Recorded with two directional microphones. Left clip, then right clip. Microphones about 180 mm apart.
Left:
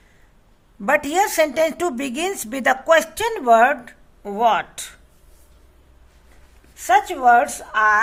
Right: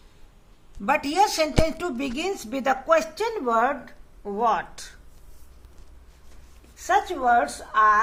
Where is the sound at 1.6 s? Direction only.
75° left (ahead or behind).